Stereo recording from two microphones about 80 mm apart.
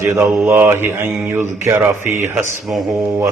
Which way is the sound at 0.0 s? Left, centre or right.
Right.